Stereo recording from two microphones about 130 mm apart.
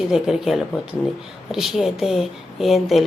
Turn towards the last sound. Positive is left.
turn(degrees=0)  # may be behind; listen again after turning